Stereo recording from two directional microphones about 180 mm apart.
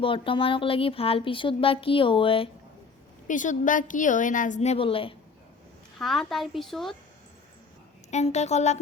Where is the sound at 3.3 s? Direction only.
45° left (ahead or behind); by 5.2 s 30° left (ahead or behind).